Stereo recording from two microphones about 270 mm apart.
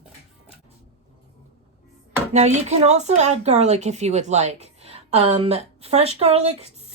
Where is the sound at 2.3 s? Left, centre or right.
Right.